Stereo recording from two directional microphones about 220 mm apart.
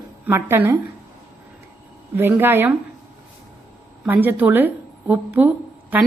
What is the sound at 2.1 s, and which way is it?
Speech, 10° right (ahead or behind).